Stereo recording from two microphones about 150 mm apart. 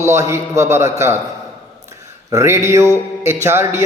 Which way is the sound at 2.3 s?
20° right (ahead or behind).